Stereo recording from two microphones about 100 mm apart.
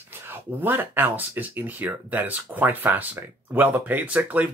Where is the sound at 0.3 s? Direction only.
20° right (ahead or behind).